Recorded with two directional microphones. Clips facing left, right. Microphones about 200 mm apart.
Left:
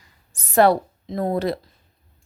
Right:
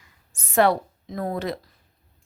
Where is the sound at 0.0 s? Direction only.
35° left (ahead or behind).